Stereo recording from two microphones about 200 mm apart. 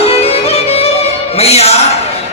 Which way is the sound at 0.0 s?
30° left (ahead or behind).